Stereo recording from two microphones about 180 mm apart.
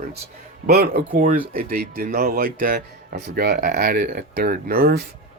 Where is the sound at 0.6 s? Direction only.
60° right (ahead or behind).